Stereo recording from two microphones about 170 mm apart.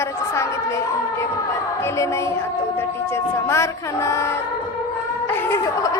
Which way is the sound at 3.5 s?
15° left (ahead or behind).